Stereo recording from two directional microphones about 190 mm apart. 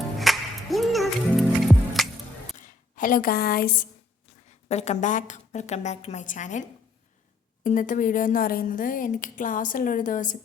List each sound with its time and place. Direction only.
0.2 s music: centre (ahead or behind)
2.6 s speech: 45° left (ahead or behind)
4.4 s a woman's voice: 35° left (ahead or behind)